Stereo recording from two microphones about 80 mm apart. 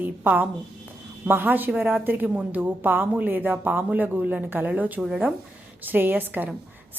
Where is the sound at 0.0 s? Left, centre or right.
Right.